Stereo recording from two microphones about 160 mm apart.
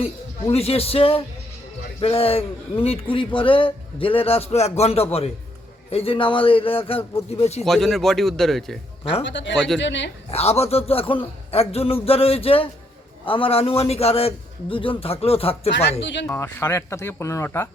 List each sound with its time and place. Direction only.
0.5 s a man's voice: 40° left (ahead or behind)
7.6 s a man's voice: centre (ahead or behind)
9.2 s speech: 90° left
10.3 s a man's voice: 40° left (ahead or behind)
15.7 s speech: 90° left
16.2 s speech: 15° left (ahead or behind)